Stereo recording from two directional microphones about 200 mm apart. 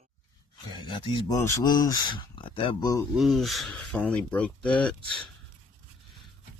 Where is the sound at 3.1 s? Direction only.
Centre (ahead or behind).